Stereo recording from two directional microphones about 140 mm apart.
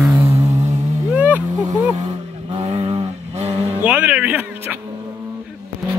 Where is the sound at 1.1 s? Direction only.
10° right (ahead or behind).